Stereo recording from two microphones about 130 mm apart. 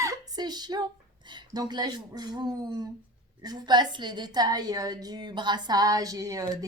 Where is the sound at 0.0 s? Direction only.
30° right (ahead or behind).